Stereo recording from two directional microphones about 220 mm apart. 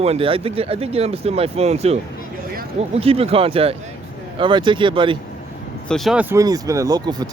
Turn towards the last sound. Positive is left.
turn(degrees=-15)  # may be behind; listen again after turning